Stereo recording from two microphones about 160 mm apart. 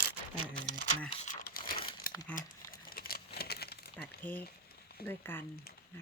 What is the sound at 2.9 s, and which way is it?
Crumpling, 70° left (ahead or behind).